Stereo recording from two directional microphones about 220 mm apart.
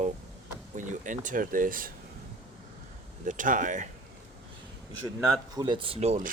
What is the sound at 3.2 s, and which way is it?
Speech, 35° right (ahead or behind).